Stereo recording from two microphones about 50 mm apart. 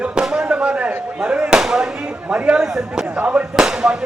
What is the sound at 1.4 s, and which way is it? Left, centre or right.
Speech, centre.